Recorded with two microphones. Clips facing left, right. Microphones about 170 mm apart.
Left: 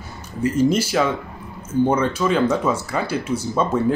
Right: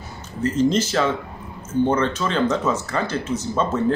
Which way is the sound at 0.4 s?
10° left (ahead or behind).